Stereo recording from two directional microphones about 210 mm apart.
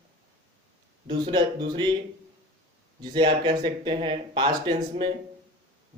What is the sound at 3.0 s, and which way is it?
Speech, 20° right (ahead or behind).